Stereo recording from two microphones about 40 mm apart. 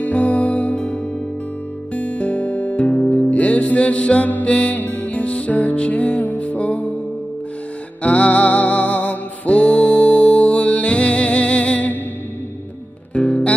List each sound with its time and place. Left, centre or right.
0.0 s music: left
2.0 s music: left
8.0 s music: left
13.1 s guitar: left